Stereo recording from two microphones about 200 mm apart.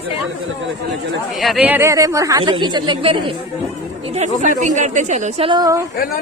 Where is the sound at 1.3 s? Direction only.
Centre (ahead or behind); by 3.4 s 25° right (ahead or behind).